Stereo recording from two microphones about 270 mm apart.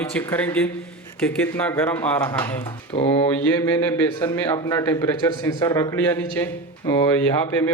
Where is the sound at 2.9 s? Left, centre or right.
Left.